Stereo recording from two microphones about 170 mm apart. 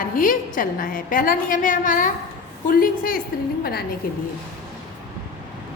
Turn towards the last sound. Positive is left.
turn(degrees=60)  # may be behind; listen again after turning